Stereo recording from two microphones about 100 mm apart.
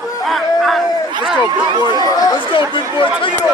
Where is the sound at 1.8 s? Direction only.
45° left (ahead or behind).